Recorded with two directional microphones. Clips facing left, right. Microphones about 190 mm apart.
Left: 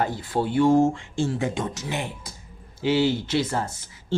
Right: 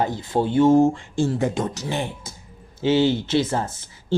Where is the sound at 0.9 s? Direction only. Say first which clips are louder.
Right 3 dB; 40° right (ahead or behind).